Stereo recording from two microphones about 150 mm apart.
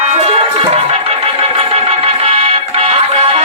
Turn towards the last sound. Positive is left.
turn(degrees=-40)  # may be behind; listen again after turning